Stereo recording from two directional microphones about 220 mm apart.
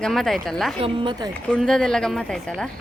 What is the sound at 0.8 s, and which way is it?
Speech, 25° right (ahead or behind).